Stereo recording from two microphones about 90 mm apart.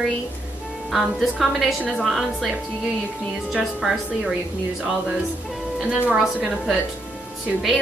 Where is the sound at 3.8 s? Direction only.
5° right (ahead or behind).